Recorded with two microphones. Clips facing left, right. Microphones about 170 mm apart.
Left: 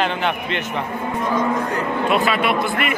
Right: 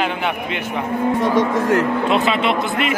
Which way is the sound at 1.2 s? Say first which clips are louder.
Even; 90° right.